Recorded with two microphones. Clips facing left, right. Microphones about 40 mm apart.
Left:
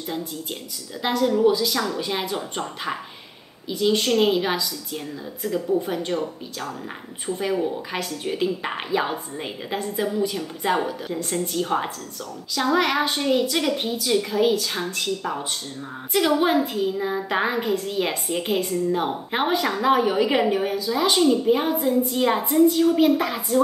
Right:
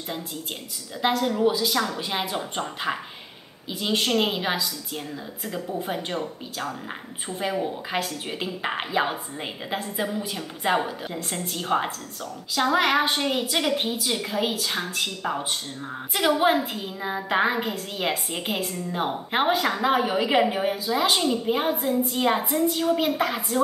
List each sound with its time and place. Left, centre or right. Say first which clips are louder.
1.1 s a woman's voice: left 6 dB; right
16.1 s speech: left 1 dB; centre
20.5 s speech: left 1 dB; right